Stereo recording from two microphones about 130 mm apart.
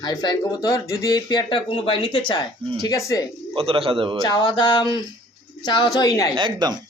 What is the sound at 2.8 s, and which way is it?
Speech, 25° left (ahead or behind).